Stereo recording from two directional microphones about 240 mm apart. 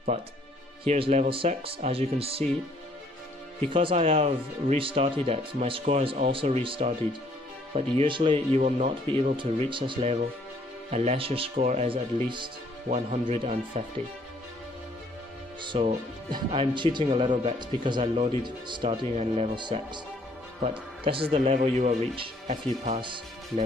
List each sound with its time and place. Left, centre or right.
0.8 s speech: right
3.6 s speech: right
15.6 s speech: right
21.0 s speech: right